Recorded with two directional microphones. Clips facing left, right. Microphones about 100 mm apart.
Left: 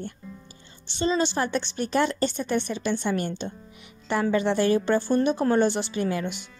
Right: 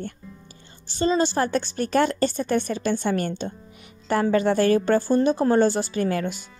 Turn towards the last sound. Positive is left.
turn(degrees=-45)  # may be behind; listen again after turning